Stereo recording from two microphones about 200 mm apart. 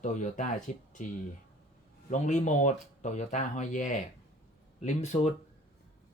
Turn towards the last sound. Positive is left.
turn(degrees=35)  # may be behind; listen again after turning